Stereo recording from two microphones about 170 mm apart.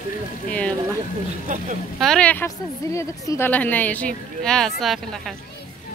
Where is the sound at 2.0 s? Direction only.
5° left (ahead or behind).